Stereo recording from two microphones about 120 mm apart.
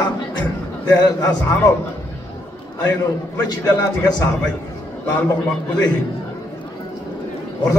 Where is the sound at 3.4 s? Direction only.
30° left (ahead or behind).